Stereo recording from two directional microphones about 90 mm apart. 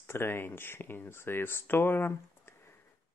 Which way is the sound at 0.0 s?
25° left (ahead or behind).